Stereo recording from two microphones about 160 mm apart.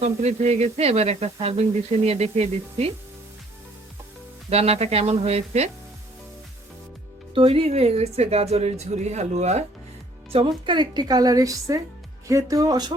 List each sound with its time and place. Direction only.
0.0 s speech: 45° right (ahead or behind)
4.4 s speech: 40° right (ahead or behind)
7.3 s speech: 35° right (ahead or behind)
10.3 s a woman's voice: 30° right (ahead or behind)